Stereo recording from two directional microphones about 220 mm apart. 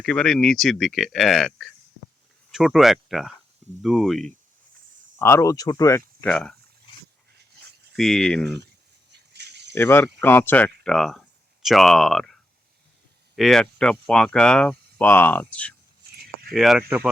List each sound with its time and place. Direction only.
0.0 s speech: 5° left (ahead or behind)
5.2 s speech: 15° left (ahead or behind)
6.2 s speech: 5° left (ahead or behind)
7.9 s speech: centre (ahead or behind)
9.3 s a sound: 50° right (ahead or behind)
9.7 s speech: 10° left (ahead or behind)